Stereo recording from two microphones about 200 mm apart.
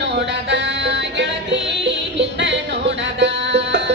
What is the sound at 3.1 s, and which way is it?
Music, 60° right (ahead or behind).